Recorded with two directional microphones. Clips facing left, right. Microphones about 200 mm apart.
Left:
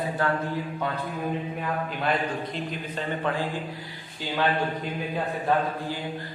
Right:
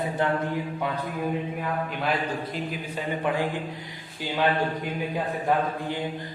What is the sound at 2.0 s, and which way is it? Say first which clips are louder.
A man's voice: left 2 dB; 5° right (ahead or behind).